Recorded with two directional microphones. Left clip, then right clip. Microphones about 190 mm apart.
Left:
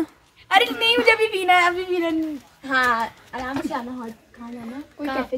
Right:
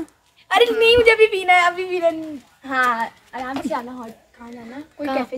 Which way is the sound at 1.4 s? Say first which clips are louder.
Right 2 dB; 10° right (ahead or behind).